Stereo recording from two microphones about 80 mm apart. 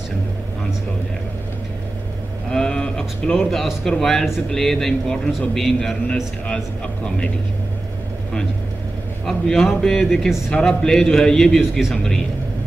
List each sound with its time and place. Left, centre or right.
2.5 s a man's voice: centre
9.2 s a man's voice: centre